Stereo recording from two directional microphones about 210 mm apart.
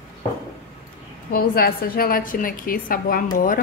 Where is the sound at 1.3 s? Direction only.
45° left (ahead or behind).